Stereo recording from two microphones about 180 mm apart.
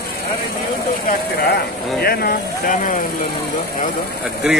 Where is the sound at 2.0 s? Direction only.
60° left (ahead or behind).